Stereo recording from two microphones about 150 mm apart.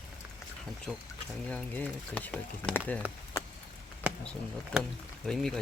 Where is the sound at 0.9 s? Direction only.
5° right (ahead or behind).